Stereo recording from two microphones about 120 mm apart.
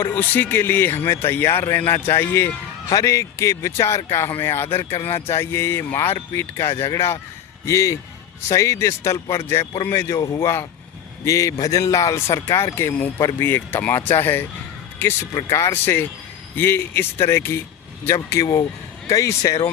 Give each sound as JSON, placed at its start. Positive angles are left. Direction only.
{"t": 0.0, "sound": "speech", "side_deg": 15}